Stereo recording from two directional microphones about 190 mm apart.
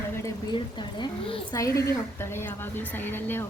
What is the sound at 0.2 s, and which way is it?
A woman's voice, 20° left (ahead or behind).